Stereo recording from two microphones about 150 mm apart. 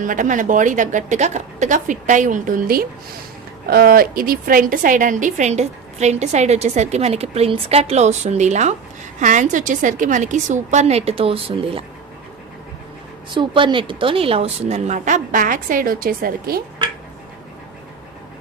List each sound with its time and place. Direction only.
0.0 s a woman's voice: 60° right (ahead or behind)
3.7 s a woman's voice: 85° right; by 11.8 s 40° right (ahead or behind)
13.3 s a woman's voice: 35° right (ahead or behind); by 16.6 s 80° right